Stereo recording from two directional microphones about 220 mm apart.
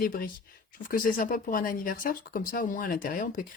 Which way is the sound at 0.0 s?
40° left (ahead or behind).